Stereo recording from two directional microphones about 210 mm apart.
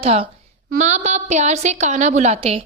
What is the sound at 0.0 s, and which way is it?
A woman's voice, 30° right (ahead or behind).